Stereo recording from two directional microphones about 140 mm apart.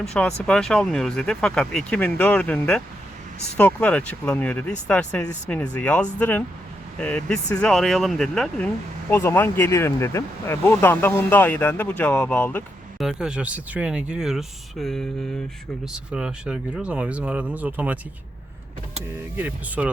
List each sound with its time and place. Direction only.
0.0 s speech: 5° left (ahead or behind)
13.0 s speech: 5° right (ahead or behind)
19.4 s speech: 10° right (ahead or behind)